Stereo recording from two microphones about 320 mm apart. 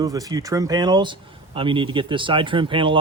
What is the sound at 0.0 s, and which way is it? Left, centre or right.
Speech, centre.